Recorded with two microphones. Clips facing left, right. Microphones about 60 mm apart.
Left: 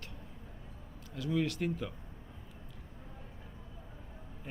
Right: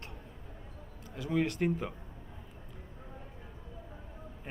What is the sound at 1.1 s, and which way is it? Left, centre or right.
Speech, right.